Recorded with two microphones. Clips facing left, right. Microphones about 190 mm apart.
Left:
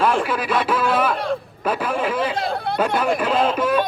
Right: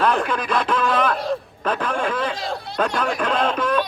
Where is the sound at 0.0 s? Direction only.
5° left (ahead or behind).